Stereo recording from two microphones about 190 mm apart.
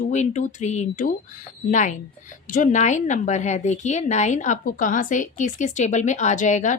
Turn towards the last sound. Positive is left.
turn(degrees=40)  # may be behind; listen again after turning